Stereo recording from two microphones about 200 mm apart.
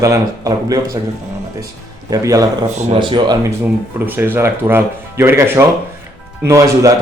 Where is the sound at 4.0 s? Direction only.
10° right (ahead or behind).